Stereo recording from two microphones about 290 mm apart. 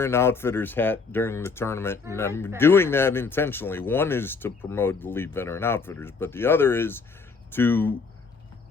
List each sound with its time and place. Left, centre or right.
0.0 s speech: centre